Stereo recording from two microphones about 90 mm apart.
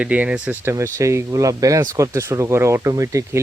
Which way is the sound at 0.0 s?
15° right (ahead or behind).